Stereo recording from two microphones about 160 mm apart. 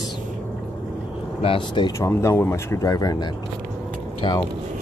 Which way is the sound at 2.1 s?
15° left (ahead or behind).